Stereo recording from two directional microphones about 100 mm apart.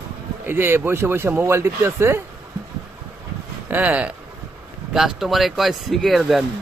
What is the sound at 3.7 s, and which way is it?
Speech, 15° right (ahead or behind).